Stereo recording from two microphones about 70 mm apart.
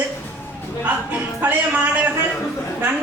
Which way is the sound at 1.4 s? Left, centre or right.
Right.